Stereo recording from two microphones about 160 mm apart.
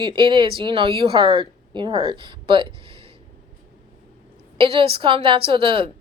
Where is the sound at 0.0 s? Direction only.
30° right (ahead or behind).